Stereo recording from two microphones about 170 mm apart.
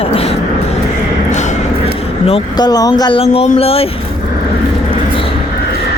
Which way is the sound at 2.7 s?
20° left (ahead or behind).